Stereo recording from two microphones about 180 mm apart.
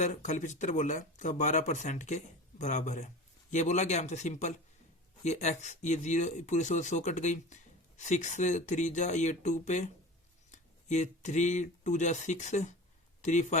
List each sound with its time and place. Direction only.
0.0 s speech: 40° left (ahead or behind)